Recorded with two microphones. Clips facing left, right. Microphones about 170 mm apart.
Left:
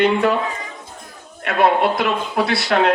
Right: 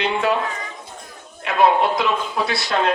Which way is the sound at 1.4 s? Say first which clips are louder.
Left 1 dB; 60° left (ahead or behind).